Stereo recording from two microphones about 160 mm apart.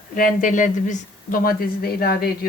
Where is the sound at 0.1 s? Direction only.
60° left (ahead or behind).